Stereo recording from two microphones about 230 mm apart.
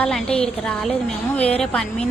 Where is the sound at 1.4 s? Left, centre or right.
Left.